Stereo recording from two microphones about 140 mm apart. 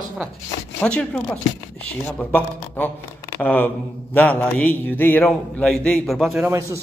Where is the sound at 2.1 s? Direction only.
10° left (ahead or behind).